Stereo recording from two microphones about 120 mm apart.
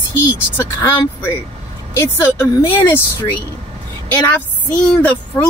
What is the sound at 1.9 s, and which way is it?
Speech, 20° left (ahead or behind).